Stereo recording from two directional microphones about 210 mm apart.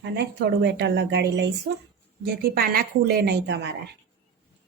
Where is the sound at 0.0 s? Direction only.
55° right (ahead or behind).